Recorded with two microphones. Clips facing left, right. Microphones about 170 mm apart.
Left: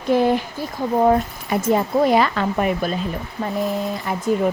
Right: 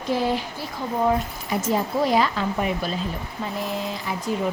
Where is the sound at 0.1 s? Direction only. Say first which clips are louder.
Left 6 dB; 55° left (ahead or behind).